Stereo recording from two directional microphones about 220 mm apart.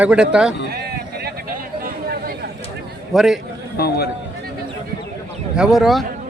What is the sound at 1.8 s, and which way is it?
Chatter, 40° right (ahead or behind).